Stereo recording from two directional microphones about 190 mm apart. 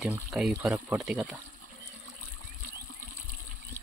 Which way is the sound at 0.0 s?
5° right (ahead or behind).